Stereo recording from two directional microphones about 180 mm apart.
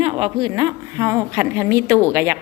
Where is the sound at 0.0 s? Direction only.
30° right (ahead or behind).